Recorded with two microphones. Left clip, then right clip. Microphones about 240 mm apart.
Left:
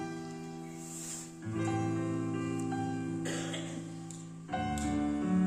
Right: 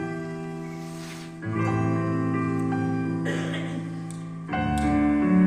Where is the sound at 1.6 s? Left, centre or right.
Left.